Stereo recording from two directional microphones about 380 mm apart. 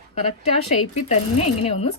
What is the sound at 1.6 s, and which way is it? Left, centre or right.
Speech, centre.